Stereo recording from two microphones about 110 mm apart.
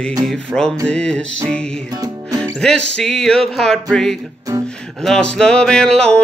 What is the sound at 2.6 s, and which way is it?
Music, 5° left (ahead or behind).